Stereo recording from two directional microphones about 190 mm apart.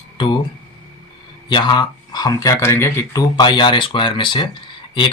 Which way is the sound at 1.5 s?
25° left (ahead or behind).